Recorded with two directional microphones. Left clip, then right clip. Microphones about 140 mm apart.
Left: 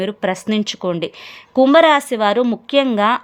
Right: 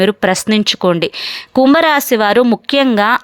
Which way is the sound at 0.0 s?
30° right (ahead or behind).